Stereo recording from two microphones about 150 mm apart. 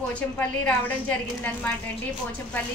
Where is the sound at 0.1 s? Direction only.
10° left (ahead or behind).